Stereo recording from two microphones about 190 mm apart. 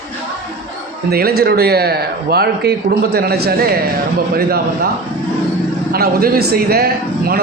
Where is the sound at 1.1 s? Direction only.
55° right (ahead or behind).